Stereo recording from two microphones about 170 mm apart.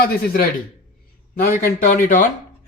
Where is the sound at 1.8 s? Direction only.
50° left (ahead or behind).